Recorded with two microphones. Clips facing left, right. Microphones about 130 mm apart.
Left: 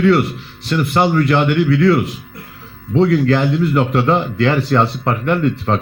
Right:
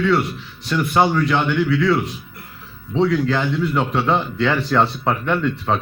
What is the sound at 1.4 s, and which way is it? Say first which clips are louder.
Speech: left 4 dB; 65° left (ahead or behind).